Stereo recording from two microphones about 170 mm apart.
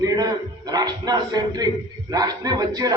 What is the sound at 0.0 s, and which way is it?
A man's voice, 20° right (ahead or behind).